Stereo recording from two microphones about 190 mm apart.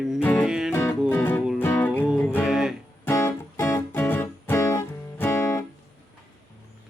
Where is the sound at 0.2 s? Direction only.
10° left (ahead or behind).